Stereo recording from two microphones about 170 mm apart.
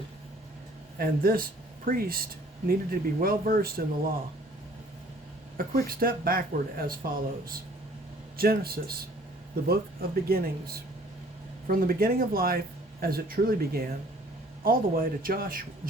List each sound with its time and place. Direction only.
0.9 s speech: 60° right (ahead or behind)
5.5 s speech: 60° right (ahead or behind)
11.7 s speech: 60° right (ahead or behind)